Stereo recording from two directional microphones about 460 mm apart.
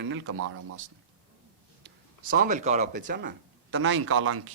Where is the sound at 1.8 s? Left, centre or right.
Centre.